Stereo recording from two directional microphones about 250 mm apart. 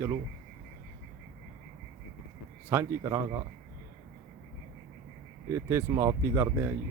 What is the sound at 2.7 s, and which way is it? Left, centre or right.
Speech, centre.